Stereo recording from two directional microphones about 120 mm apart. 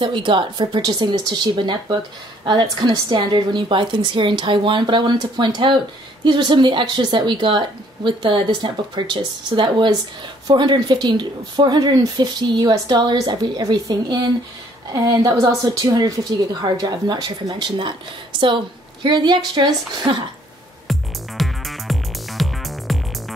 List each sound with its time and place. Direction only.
0.0 s speech: 45° right (ahead or behind)
19.0 s speech: 40° right (ahead or behind)
20.9 s music: centre (ahead or behind)